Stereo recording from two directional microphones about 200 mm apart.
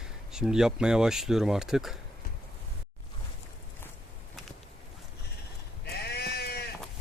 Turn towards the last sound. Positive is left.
turn(degrees=55)  # may be behind; listen again after turning